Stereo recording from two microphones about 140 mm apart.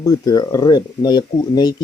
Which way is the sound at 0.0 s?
25° left (ahead or behind).